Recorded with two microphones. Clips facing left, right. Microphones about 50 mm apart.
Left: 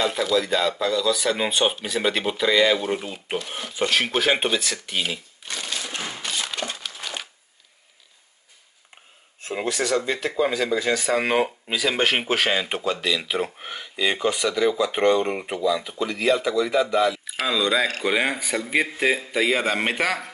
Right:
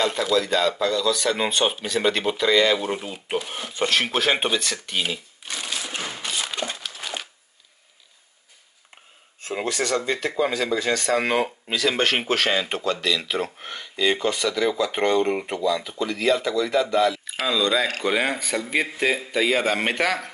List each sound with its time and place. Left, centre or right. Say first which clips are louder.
0.0 s speech: even; centre
3.4 s a sound: even; centre
9.4 s speech: even; centre